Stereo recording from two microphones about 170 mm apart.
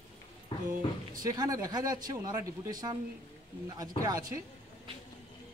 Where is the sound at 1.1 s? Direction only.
20° right (ahead or behind).